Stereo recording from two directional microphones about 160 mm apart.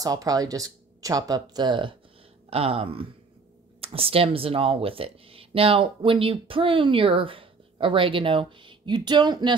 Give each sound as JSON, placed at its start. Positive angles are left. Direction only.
{"t": 0.0, "sound": "speech", "side_deg": -25}